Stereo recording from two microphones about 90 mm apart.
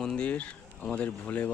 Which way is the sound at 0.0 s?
10° left (ahead or behind).